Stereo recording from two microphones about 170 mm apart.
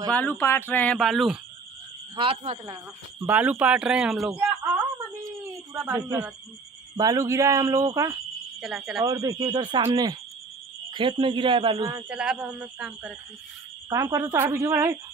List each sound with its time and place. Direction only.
0.1 s speech: 10° left (ahead or behind)
2.1 s speech: 35° right (ahead or behind)
2.6 s speech: 20° right (ahead or behind)
3.3 s speech: 10° right (ahead or behind)
5.8 s speech: 15° right (ahead or behind)
8.5 s speech: centre (ahead or behind)
9.0 s speech: 20° right (ahead or behind)
12.1 s speech: 5° right (ahead or behind)
13.8 s speech: 20° right (ahead or behind)